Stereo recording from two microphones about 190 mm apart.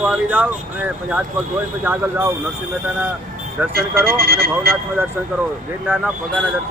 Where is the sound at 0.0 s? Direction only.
5° right (ahead or behind).